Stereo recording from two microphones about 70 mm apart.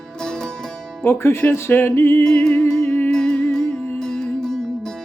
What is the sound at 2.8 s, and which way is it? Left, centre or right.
Music, left.